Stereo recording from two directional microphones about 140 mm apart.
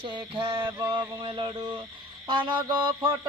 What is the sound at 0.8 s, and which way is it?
Speech, 35° right (ahead or behind).